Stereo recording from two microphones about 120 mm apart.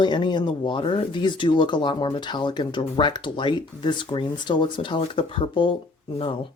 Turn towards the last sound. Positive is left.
turn(degrees=50)  # may be behind; listen again after turning